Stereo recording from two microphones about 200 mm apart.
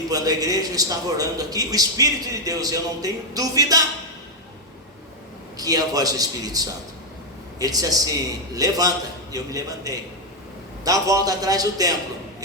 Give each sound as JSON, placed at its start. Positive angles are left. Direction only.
{"t": 0.1, "sound": "a man's voice", "side_deg": -20}
{"t": 5.5, "sound": "a man's voice", "side_deg": -20}